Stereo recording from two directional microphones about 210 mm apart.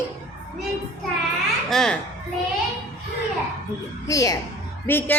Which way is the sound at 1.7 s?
Centre (ahead or behind).